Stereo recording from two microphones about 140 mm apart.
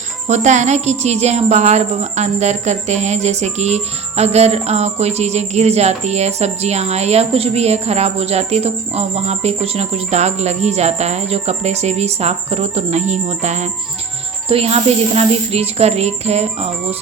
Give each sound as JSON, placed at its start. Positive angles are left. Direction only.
{"t": 0.3, "sound": "speech", "side_deg": -55}
{"t": 14.4, "sound": "speech", "side_deg": -45}